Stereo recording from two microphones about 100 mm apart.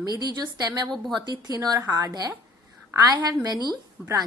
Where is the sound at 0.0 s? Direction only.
40° right (ahead or behind).